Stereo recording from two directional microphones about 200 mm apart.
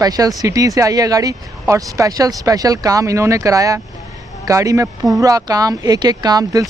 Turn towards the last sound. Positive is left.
turn(degrees=-20)  # may be behind; listen again after turning